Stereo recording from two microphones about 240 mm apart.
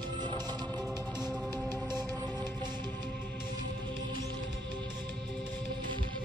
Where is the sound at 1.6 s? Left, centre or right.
Centre.